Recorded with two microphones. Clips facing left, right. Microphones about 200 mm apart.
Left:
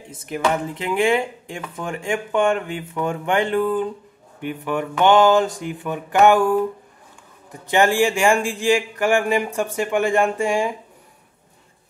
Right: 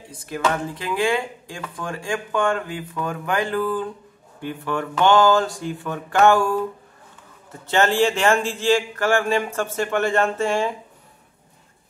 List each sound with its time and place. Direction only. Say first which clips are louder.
0.1 s a man's voice: left 2 dB; 20° left (ahead or behind)
7.6 s a man's voice: left 1 dB; 15° left (ahead or behind)